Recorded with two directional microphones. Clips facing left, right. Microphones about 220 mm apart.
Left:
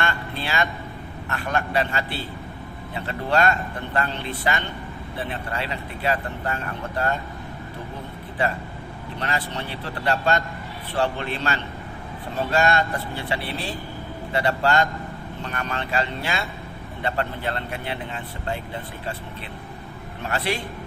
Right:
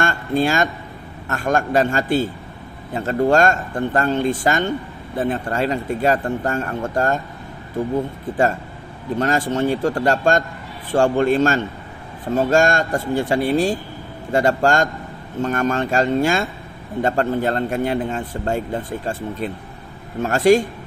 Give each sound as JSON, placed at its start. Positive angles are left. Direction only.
{"t": 0.0, "sound": "a sound", "side_deg": -45}
{"t": 1.3, "sound": "speech", "side_deg": -45}
{"t": 9.1, "sound": "speech", "side_deg": -45}